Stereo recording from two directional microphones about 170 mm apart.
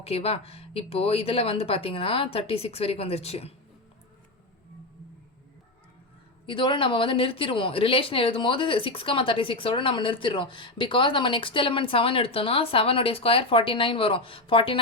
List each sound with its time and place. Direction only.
0.0 s speech: 35° left (ahead or behind)
6.4 s speech: 30° left (ahead or behind)